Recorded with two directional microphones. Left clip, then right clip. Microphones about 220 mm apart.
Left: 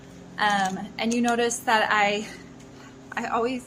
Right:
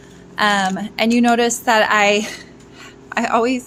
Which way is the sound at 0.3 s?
35° right (ahead or behind).